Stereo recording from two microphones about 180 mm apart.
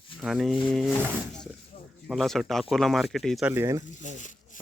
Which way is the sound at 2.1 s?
Centre (ahead or behind).